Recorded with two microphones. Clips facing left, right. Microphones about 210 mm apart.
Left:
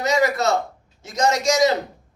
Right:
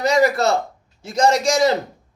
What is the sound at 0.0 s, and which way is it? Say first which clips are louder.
A man's voice: right 3 dB; 30° right (ahead or behind).